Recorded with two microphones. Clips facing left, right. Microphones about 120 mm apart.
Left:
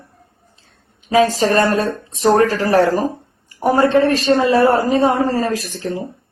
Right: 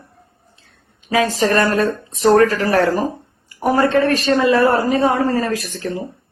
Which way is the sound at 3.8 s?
20° left (ahead or behind).